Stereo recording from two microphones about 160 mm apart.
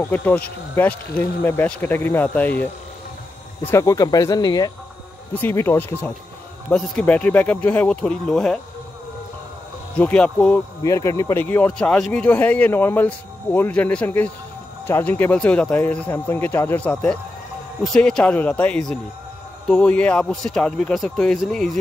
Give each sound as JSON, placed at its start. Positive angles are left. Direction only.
{"t": 0.0, "sound": "speech", "side_deg": 10}
{"t": 3.7, "sound": "speech", "side_deg": 20}
{"t": 5.3, "sound": "speech", "side_deg": 15}
{"t": 9.9, "sound": "speech", "side_deg": 10}
{"t": 10.8, "sound": "a man's voice", "side_deg": 20}